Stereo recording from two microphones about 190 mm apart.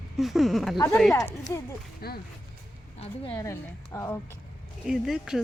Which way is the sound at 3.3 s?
15° left (ahead or behind).